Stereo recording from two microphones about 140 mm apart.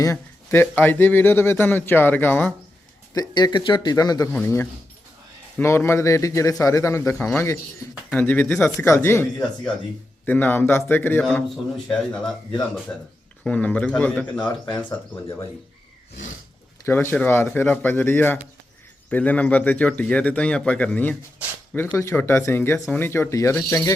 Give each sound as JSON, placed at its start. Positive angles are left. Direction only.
{"t": 0.0, "sound": "speech", "side_deg": 20}
{"t": 3.2, "sound": "a man's voice", "side_deg": 30}
{"t": 4.3, "sound": "a man's voice", "side_deg": 15}
{"t": 10.2, "sound": "speech", "side_deg": 15}
{"t": 16.8, "sound": "speech", "side_deg": 15}